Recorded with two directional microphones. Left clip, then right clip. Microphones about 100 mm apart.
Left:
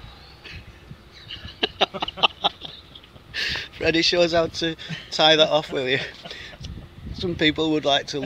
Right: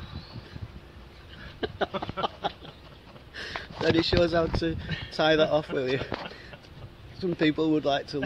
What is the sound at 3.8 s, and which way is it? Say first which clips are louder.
Speech: left 4 dB; 20° left (ahead or behind).